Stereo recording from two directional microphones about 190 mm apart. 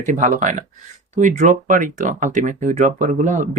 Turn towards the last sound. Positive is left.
turn(degrees=-40)  # may be behind; listen again after turning